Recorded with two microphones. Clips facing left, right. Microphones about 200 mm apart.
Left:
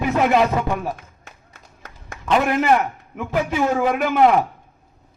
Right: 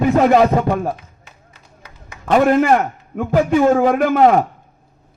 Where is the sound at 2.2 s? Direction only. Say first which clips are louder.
Right 5 dB; 45° right (ahead or behind).